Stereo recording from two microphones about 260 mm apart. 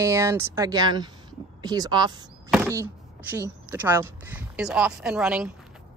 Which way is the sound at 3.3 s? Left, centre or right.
Centre.